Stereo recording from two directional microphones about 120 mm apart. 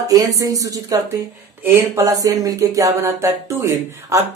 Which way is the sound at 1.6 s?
20° right (ahead or behind).